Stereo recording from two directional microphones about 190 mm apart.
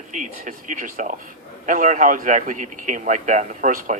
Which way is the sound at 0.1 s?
40° right (ahead or behind).